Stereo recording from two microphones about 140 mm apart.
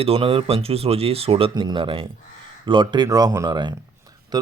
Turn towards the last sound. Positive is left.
turn(degrees=-30)  # may be behind; listen again after turning